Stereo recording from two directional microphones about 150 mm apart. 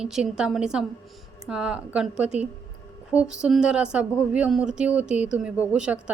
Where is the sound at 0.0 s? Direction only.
5° right (ahead or behind).